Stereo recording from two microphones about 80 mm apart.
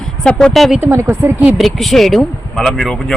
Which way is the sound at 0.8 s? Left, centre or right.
Right.